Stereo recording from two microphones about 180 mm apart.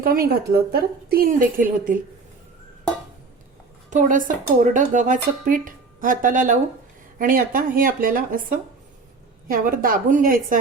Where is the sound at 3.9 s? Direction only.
45° right (ahead or behind).